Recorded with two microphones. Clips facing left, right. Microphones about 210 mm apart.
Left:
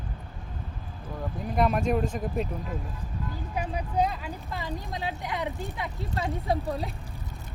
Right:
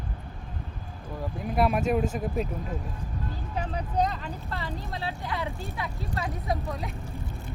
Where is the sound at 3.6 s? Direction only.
10° left (ahead or behind); by 6.9 s 30° left (ahead or behind).